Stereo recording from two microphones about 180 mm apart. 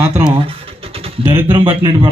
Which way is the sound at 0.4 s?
30° right (ahead or behind).